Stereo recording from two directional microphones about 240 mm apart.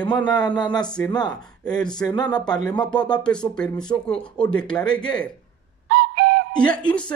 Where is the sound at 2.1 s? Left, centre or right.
Centre.